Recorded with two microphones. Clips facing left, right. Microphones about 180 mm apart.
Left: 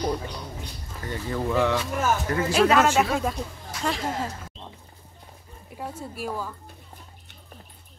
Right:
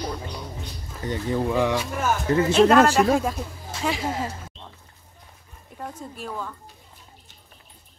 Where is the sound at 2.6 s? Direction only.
5° left (ahead or behind).